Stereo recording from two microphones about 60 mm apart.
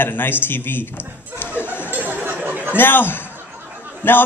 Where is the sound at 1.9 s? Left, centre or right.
Right.